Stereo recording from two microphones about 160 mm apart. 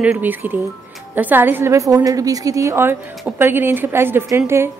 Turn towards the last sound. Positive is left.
turn(degrees=-15)  # may be behind; listen again after turning